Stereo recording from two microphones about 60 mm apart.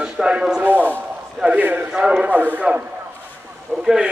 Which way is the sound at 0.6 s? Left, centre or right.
Right.